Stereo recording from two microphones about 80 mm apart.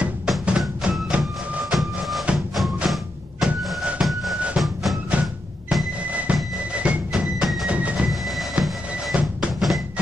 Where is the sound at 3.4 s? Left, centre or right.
Centre.